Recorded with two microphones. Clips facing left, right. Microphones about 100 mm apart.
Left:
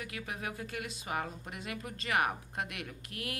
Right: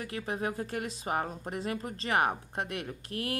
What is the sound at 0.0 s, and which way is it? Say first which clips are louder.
Speech: right 6 dB; 35° right (ahead or behind).